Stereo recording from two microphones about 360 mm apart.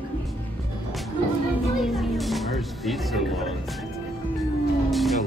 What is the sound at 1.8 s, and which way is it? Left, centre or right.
Music, centre.